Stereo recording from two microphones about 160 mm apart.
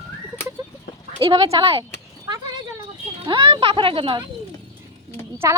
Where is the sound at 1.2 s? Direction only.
35° right (ahead or behind).